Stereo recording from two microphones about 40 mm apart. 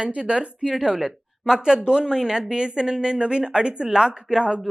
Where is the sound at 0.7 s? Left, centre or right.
Centre.